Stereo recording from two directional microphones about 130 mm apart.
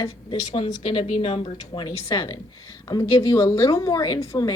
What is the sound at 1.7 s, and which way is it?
A woman's voice, 35° left (ahead or behind).